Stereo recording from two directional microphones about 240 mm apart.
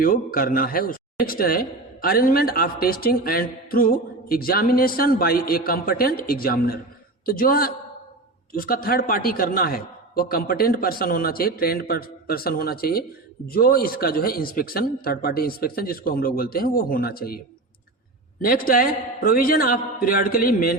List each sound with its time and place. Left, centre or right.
0.0 s a man's voice: left
18.4 s a man's voice: left